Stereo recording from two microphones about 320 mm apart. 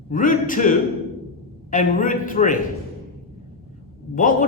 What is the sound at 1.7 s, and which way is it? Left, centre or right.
Speech, left.